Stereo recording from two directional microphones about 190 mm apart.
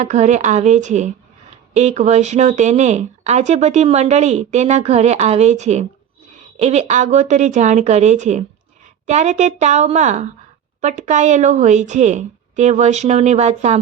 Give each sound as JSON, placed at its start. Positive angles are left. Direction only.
{"t": 0.0, "sound": "speech", "side_deg": -40}